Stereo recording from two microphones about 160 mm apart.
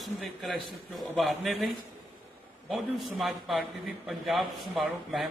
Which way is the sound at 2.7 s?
Centre (ahead or behind).